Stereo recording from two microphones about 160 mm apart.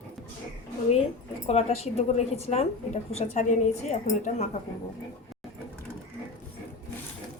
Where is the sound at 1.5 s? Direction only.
40° left (ahead or behind).